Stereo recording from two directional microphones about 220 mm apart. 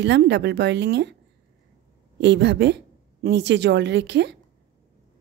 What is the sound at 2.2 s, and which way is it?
A woman's voice, 55° right (ahead or behind).